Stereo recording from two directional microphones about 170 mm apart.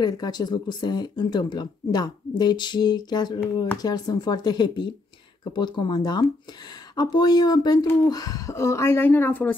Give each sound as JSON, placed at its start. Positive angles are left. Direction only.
{"t": 0.0, "sound": "speech", "side_deg": 25}